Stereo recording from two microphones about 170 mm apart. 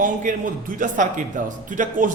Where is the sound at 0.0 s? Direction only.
50° right (ahead or behind).